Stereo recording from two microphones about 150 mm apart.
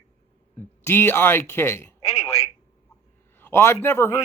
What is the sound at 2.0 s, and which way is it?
Speech, 45° left (ahead or behind).